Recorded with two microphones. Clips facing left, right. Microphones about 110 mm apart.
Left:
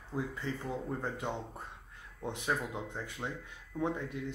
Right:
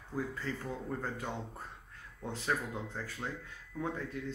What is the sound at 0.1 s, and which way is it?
A man's voice, 20° left (ahead or behind).